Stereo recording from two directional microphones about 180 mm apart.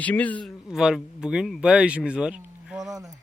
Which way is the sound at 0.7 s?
5° right (ahead or behind).